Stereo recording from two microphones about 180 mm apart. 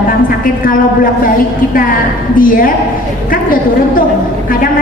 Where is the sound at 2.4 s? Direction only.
50° left (ahead or behind).